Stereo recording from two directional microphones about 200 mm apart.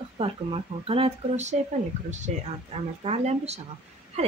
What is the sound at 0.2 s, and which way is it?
Speech, 30° right (ahead or behind).